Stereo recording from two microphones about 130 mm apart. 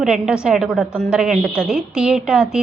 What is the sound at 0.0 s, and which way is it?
A woman's voice, 5° right (ahead or behind).